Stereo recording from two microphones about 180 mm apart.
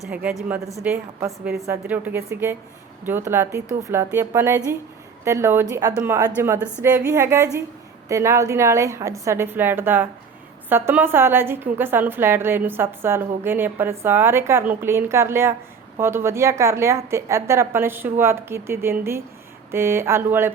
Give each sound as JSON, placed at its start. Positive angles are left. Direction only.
{"t": 0.0, "sound": "a woman's voice", "side_deg": -5}